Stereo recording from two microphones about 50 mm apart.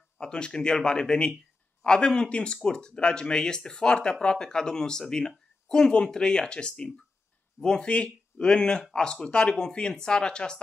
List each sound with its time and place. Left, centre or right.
0.2 s speech: centre